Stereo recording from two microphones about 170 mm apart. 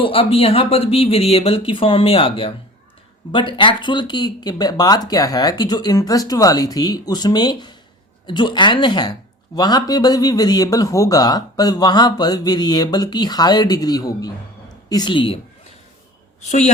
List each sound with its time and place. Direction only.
0.0 s speech: 30° left (ahead or behind)
16.4 s speech: 40° left (ahead or behind)